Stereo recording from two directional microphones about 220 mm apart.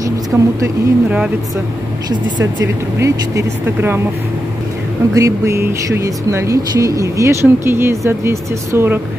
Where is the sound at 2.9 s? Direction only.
10° right (ahead or behind).